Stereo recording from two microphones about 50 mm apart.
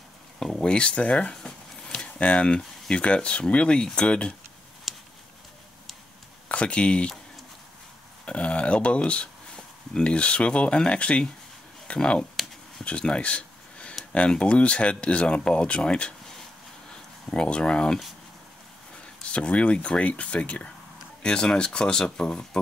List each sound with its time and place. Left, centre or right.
0.4 s speech: centre
1.9 s speech: left
4.9 s a sound: centre
6.5 s speech: left
8.3 s speech: left
12.8 s a sound: left
14.3 s speech: left
17.3 s speech: centre
19.2 s speech: left